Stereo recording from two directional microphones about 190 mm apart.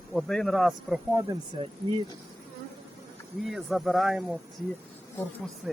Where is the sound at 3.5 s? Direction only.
Centre (ahead or behind).